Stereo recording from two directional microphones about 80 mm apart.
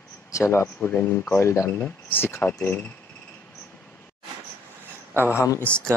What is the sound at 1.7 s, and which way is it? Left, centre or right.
Speech, left.